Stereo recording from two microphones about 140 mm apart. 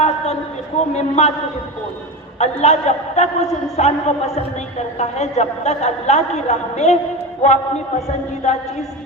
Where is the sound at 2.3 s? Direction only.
50° left (ahead or behind).